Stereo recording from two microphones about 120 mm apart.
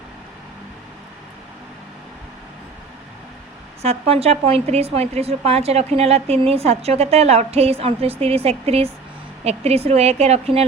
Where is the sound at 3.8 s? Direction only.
60° right (ahead or behind).